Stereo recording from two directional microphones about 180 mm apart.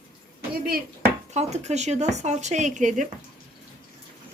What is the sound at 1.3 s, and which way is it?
Speech, 40° right (ahead or behind).